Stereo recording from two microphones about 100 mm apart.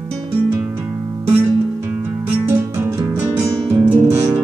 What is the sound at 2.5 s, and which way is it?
Music, 25° right (ahead or behind).